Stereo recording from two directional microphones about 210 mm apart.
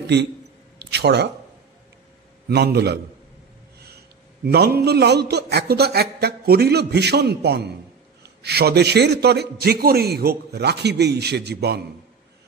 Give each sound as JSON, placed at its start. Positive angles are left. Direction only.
{"t": 0.0, "sound": "speech", "side_deg": -55}
{"t": 0.7, "sound": "a sound", "side_deg": -50}
{"t": 2.5, "sound": "a man's voice", "side_deg": -50}
{"t": 4.5, "sound": "a man's voice", "side_deg": -50}